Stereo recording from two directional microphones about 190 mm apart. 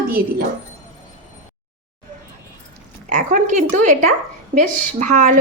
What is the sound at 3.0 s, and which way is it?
A woman's voice, 45° right (ahead or behind).